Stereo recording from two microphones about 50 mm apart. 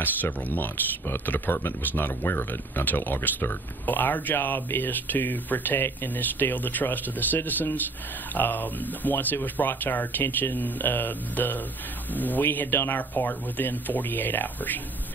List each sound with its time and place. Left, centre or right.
0.0 s speech: left
8.4 s speech: left